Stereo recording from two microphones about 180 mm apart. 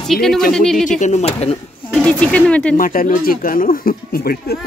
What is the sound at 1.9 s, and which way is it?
Speech, 5° left (ahead or behind).